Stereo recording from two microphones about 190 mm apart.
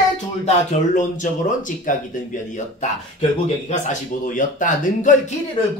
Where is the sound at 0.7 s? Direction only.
40° left (ahead or behind).